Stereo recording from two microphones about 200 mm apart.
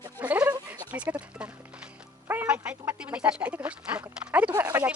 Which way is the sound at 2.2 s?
10° right (ahead or behind).